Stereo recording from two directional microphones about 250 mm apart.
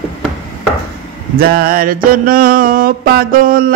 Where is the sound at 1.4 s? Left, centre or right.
Right.